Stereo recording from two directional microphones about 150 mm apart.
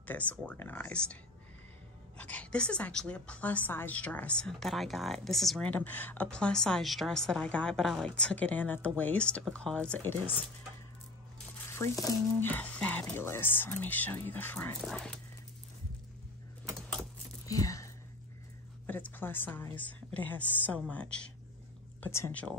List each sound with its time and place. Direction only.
0.0 s a woman's voice: 10° left (ahead or behind)
2.3 s a woman's voice: 5° left (ahead or behind)
11.7 s speech: 20° left (ahead or behind)
12.4 s a woman's voice: 10° left (ahead or behind)
17.5 s whispering: 20° left (ahead or behind)
18.9 s a woman's voice: 10° left (ahead or behind)